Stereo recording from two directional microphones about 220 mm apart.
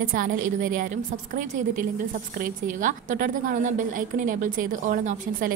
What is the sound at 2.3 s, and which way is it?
A woman's voice, 40° right (ahead or behind).